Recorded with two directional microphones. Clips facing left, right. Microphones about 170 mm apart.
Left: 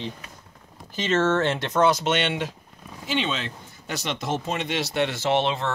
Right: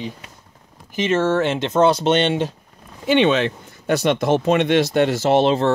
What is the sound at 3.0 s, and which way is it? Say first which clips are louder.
Speech: right 11 dB; 65° right (ahead or behind).